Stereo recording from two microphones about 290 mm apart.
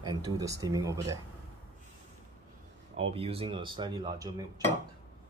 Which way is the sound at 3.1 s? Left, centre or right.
Centre.